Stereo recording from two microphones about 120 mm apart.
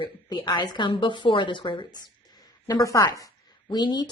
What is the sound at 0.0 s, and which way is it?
A woman's voice, 40° left (ahead or behind).